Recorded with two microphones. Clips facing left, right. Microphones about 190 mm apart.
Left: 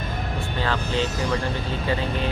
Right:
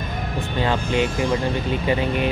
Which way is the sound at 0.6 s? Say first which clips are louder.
Right 4 dB; 15° right (ahead or behind).